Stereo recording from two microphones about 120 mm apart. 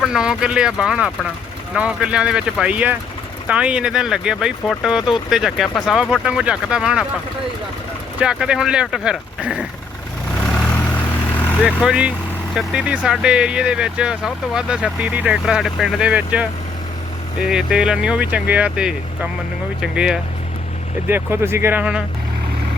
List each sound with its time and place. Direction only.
0.0 s speech: 5° right (ahead or behind)
8.2 s speech: 5° right (ahead or behind)
11.6 s speech: 10° right (ahead or behind)
17.5 s speech: 5° right (ahead or behind)
21.1 s speech: 20° right (ahead or behind)